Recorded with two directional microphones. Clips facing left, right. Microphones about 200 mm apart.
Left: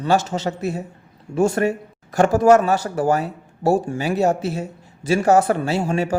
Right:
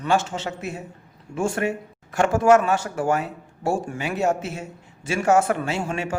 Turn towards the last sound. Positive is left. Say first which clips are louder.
# left 6 dB
turn(degrees=35)  # may be behind; listen again after turning